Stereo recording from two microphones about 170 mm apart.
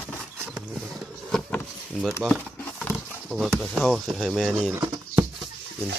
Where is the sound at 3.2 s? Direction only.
Centre (ahead or behind).